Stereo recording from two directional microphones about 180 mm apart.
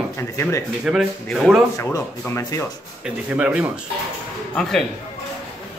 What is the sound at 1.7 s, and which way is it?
Speech, 15° left (ahead or behind).